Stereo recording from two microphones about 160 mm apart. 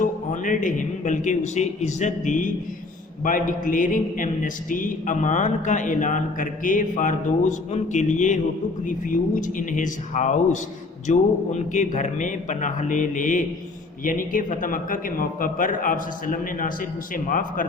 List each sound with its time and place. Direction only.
0.0 s a man's voice: 55° left (ahead or behind)